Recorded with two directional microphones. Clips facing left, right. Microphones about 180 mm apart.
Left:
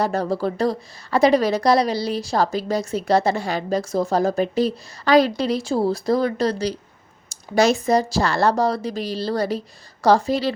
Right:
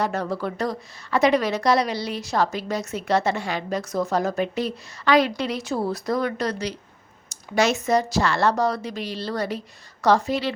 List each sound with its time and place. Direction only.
0.0 s a woman's voice: 35° left (ahead or behind)